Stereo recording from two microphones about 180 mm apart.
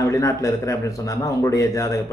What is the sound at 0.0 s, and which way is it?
A man's voice, 15° left (ahead or behind).